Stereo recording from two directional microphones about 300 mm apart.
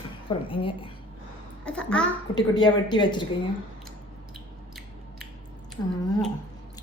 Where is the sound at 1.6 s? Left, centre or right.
Centre.